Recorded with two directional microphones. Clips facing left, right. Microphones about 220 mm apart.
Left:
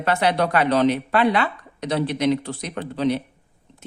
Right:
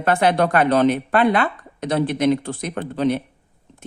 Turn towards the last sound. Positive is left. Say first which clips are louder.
# right 2 dB
turn(degrees=-50)  # may be behind; listen again after turning